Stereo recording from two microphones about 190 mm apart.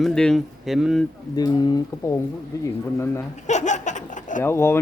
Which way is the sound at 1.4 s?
20° left (ahead or behind).